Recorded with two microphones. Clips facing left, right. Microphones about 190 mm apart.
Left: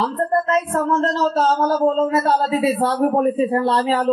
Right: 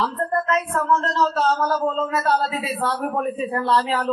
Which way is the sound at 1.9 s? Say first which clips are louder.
Left 5 dB; 35° left (ahead or behind).